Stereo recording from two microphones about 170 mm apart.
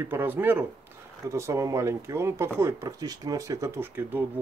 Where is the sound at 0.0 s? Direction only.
10° right (ahead or behind).